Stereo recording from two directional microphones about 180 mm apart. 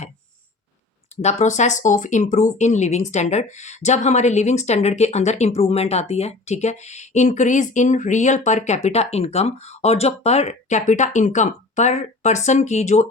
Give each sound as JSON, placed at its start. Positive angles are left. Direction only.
{"t": 1.1, "sound": "speech", "side_deg": 40}